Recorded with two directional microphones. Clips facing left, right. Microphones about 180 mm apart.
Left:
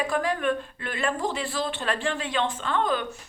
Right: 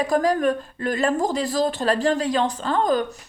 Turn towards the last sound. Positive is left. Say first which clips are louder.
# right 5 dB
turn(degrees=-40)  # may be behind; listen again after turning